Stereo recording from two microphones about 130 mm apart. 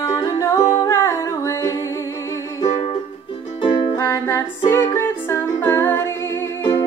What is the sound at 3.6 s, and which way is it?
Music, 40° left (ahead or behind).